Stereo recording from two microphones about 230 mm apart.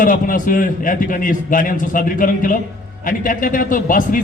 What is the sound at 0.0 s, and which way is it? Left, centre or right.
A man's voice, left.